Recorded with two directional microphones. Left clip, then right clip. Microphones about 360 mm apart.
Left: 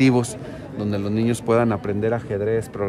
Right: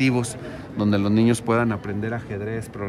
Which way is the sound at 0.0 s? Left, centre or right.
Centre.